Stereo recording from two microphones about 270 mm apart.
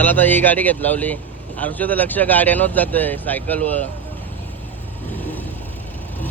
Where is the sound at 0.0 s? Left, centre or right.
Centre.